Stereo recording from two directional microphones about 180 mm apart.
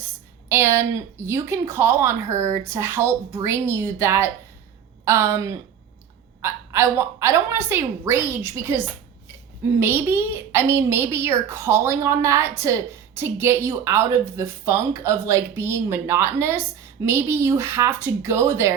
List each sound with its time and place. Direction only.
0.4 s a woman's voice: 15° right (ahead or behind)
9.8 s a woman's voice: 15° right (ahead or behind)